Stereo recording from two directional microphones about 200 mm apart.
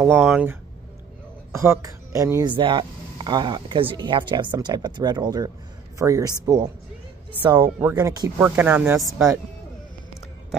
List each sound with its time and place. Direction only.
0.0 s speech: 5° right (ahead or behind)